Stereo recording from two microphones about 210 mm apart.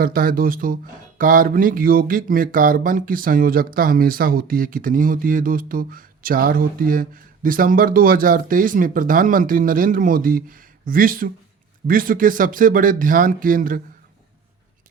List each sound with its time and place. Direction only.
0.0 s speech: 40° right (ahead or behind)